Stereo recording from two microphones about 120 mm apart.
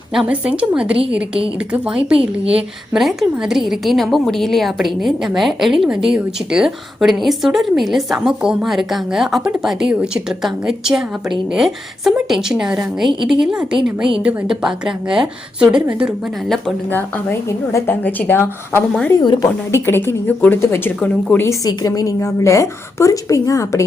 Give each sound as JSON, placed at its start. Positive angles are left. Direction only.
{"t": 0.1, "sound": "a woman's voice", "side_deg": -5}
{"t": 16.9, "sound": "a woman's voice", "side_deg": 20}
{"t": 19.2, "sound": "speech", "side_deg": 40}
{"t": 19.7, "sound": "a woman's voice", "side_deg": 20}
{"t": 21.4, "sound": "a woman's voice", "side_deg": 30}